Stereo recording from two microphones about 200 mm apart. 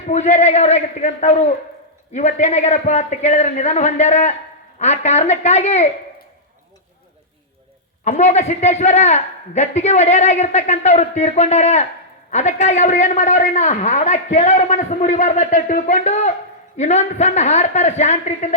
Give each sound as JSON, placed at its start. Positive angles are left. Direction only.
{"t": 0.1, "sound": "a man's voice", "side_deg": 35}
{"t": 8.0, "sound": "a man's voice", "side_deg": 35}